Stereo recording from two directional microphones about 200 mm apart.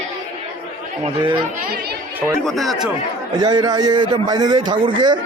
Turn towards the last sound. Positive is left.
turn(degrees=-20)  # may be behind; listen again after turning